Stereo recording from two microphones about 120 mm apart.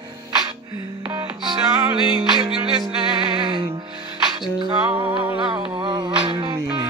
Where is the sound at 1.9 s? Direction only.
5° right (ahead or behind).